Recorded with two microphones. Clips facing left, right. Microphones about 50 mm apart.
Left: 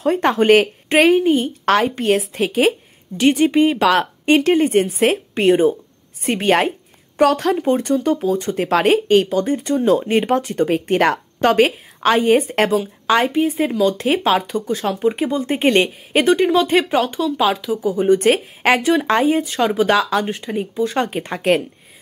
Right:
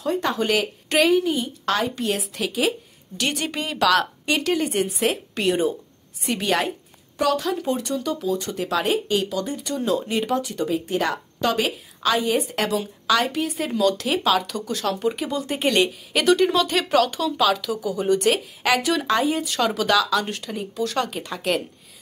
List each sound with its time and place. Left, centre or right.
0.0 s speech: left
3.2 s speech: left
13.3 s speech: left
13.9 s speech: left
19.4 s speech: centre
19.9 s speech: left
20.2 s speech: centre; by 21.6 s left